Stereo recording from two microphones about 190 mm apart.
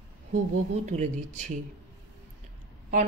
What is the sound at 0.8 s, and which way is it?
Speech, 40° right (ahead or behind).